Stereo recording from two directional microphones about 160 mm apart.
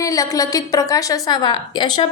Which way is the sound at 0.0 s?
20° left (ahead or behind).